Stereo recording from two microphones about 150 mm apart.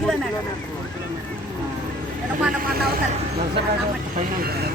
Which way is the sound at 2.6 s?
85° right.